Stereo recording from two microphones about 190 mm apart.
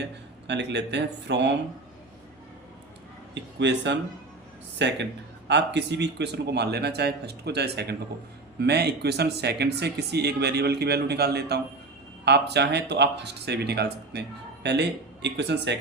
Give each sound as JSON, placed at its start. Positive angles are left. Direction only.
{"t": 0.0, "sound": "speech", "side_deg": -65}
{"t": 3.3, "sound": "speech", "side_deg": -65}